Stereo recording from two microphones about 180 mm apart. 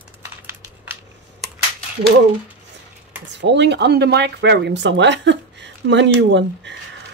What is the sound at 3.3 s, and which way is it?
Speech, 75° right (ahead or behind).